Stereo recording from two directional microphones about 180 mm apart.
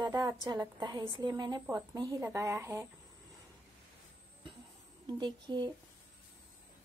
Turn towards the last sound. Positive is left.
turn(degrees=-25)  # may be behind; listen again after turning